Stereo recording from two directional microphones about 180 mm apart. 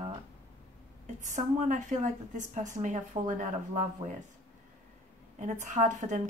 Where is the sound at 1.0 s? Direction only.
40° right (ahead or behind).